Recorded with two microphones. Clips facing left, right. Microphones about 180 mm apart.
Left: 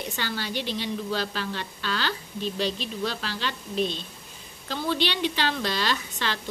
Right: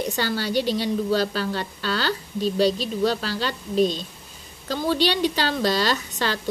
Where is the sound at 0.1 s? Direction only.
40° right (ahead or behind).